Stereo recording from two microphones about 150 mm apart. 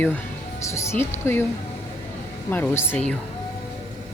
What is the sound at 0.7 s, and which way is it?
Speech, 15° left (ahead or behind).